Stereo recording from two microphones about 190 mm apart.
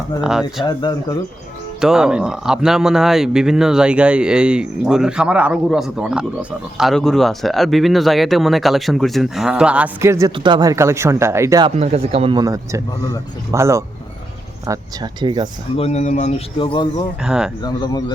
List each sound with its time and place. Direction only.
0.2 s speech: 5° right (ahead or behind)
0.6 s speech: 25° left (ahead or behind)
1.8 s speech: 5° right (ahead or behind)
11.8 s speech: 30° right (ahead or behind)
15.7 s speech: 35° left (ahead or behind)
16.6 s speech: 25° left (ahead or behind)
17.2 s speech: 5° right (ahead or behind)
17.6 s speech: 20° left (ahead or behind)